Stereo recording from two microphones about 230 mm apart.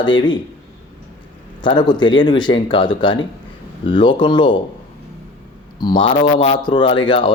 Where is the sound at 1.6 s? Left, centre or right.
Centre.